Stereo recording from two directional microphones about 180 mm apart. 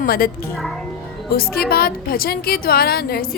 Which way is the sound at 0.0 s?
55° left (ahead or behind).